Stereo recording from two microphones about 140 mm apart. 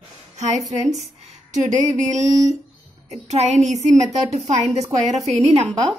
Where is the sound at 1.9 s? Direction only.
60° right (ahead or behind).